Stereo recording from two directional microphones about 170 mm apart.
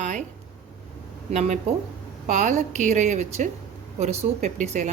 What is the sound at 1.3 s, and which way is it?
A woman's voice, 40° right (ahead or behind).